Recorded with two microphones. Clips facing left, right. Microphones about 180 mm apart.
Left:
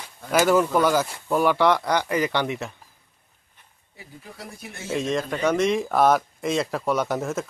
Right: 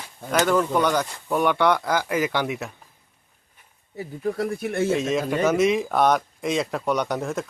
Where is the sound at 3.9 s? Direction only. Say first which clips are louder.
Right 16 dB; 55° right (ahead or behind).